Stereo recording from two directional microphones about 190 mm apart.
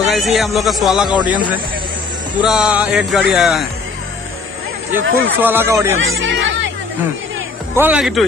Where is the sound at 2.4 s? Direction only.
5° right (ahead or behind).